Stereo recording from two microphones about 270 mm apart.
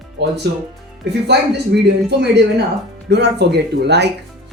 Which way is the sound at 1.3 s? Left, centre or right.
Right.